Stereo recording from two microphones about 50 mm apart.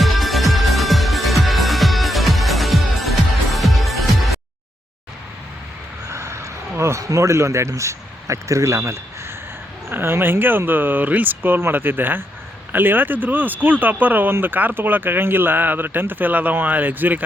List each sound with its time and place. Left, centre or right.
0.0 s music: centre
6.1 s a sound: right
9.9 s speech: right